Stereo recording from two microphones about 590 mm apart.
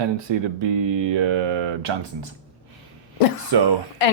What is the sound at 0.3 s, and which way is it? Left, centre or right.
Speech, right.